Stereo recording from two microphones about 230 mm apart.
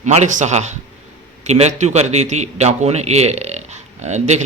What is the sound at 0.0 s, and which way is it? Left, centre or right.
A man's voice, right.